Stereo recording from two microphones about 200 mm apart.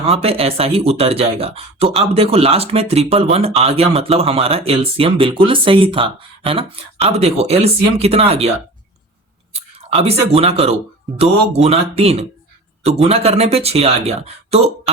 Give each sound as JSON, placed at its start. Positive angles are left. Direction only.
{"t": 0.0, "sound": "speech", "side_deg": -30}
{"t": 9.6, "sound": "speech", "side_deg": -30}